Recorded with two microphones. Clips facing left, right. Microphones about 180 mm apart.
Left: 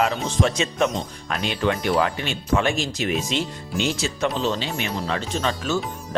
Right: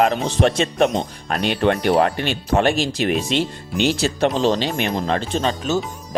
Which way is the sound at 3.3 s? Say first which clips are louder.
Right 4 dB; 70° right (ahead or behind).